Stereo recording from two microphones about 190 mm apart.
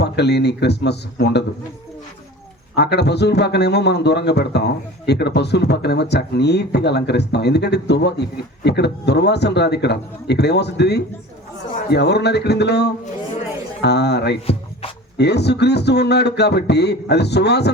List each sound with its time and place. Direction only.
0.0 s a man's voice: 60° left (ahead or behind)
2.7 s a man's voice: 60° left (ahead or behind)